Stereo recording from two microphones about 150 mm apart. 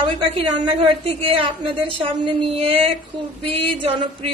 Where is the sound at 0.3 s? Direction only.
40° right (ahead or behind).